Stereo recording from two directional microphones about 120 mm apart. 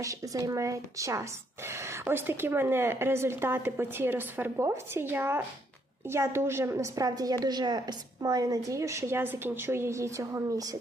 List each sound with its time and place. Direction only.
0.0 s speech: 25° right (ahead or behind)